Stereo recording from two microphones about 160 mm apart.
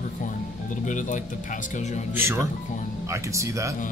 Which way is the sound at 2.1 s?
15° right (ahead or behind).